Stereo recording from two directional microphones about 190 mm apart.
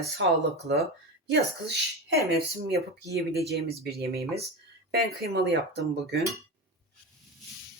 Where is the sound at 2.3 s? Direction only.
55° right (ahead or behind).